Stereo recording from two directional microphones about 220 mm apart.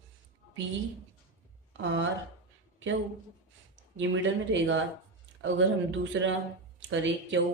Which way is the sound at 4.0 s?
55° right (ahead or behind).